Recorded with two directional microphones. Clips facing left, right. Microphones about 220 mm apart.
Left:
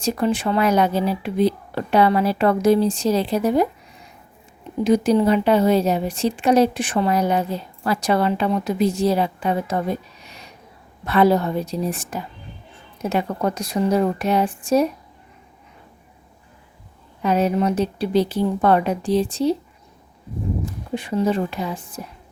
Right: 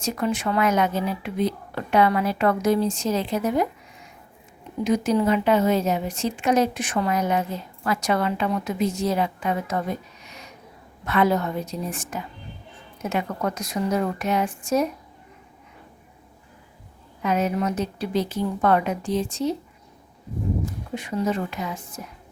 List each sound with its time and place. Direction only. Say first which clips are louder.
0.0 s a woman's voice: left 4 dB; 30° left (ahead or behind)
4.8 s a woman's voice: left 4 dB; 30° left (ahead or behind)
17.2 s a woman's voice: left 4 dB; 30° left (ahead or behind)
20.9 s a woman's voice: left 5 dB; 30° left (ahead or behind)